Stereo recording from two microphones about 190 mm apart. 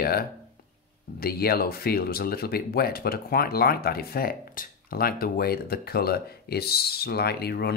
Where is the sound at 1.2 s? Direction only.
55° left (ahead or behind).